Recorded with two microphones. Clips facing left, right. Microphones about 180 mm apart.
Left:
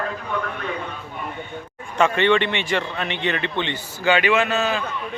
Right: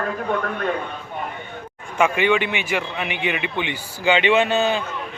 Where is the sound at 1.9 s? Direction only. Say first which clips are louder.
Left 1 dB; 10° right (ahead or behind); by 4.8 s 30° right (ahead or behind).